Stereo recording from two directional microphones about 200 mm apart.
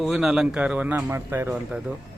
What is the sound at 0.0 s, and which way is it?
Speech, centre (ahead or behind).